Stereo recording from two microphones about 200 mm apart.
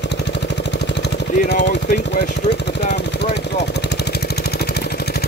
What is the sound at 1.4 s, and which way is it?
Vehicle, 50° left (ahead or behind).